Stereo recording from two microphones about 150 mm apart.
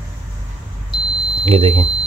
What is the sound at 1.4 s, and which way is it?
Speech, 40° right (ahead or behind).